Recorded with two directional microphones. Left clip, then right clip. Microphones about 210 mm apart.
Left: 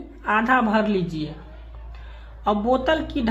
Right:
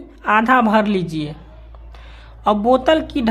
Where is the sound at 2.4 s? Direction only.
40° right (ahead or behind).